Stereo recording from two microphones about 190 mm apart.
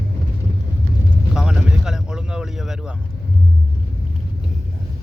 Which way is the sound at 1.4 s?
5° right (ahead or behind).